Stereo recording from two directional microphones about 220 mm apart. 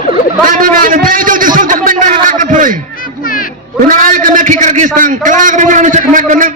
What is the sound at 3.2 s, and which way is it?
Music, 40° left (ahead or behind).